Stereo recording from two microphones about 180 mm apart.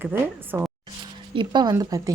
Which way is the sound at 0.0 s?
10° right (ahead or behind).